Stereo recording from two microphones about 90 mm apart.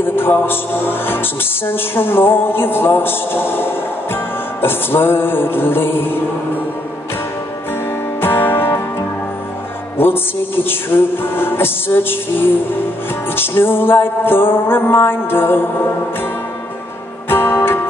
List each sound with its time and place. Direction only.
0.0 s speech: 25° left (ahead or behind)
8.2 s music: 25° left (ahead or behind)
9.9 s speech: 25° left (ahead or behind)
17.3 s music: 25° left (ahead or behind)